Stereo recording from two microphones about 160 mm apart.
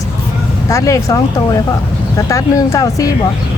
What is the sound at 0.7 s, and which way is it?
Speech, 20° left (ahead or behind).